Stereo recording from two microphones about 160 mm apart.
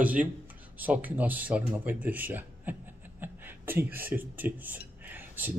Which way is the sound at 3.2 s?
10° right (ahead or behind).